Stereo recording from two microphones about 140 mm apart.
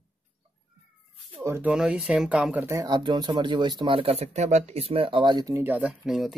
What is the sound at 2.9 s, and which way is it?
Speech, 35° right (ahead or behind).